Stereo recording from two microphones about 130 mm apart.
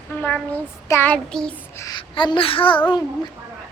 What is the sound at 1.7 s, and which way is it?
Speech, 30° left (ahead or behind).